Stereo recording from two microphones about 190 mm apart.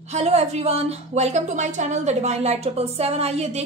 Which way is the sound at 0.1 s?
35° right (ahead or behind).